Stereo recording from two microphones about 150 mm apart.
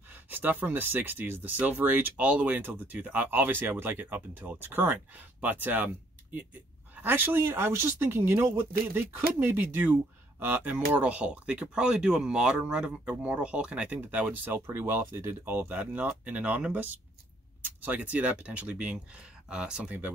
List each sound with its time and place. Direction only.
0.1 s speech: 10° right (ahead or behind)
7.0 s speech: 15° right (ahead or behind)